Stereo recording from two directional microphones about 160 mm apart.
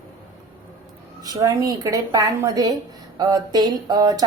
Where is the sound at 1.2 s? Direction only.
20° right (ahead or behind).